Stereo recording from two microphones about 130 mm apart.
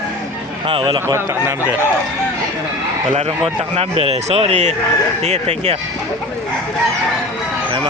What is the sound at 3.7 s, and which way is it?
Speech, 50° right (ahead or behind).